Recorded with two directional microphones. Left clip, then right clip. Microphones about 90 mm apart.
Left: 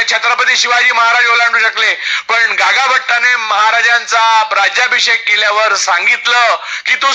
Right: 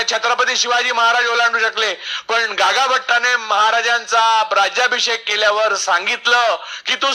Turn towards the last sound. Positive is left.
turn(degrees=-45)  # may be behind; listen again after turning